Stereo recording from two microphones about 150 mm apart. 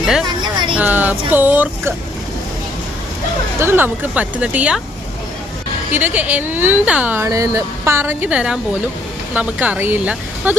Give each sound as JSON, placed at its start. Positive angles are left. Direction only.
{"t": 0.0, "sound": "a woman's voice", "side_deg": 0}
{"t": 0.3, "sound": "a sound", "side_deg": -30}
{"t": 0.8, "sound": "speech", "side_deg": -10}
{"t": 3.6, "sound": "speech", "side_deg": -15}
{"t": 5.9, "sound": "speech", "side_deg": -10}